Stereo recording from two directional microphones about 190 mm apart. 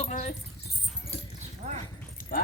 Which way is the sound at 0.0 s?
40° left (ahead or behind).